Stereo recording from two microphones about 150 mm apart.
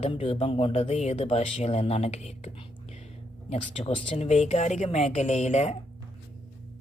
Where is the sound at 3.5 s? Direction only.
50° left (ahead or behind).